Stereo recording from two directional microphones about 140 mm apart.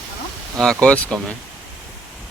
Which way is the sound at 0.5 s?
5° left (ahead or behind).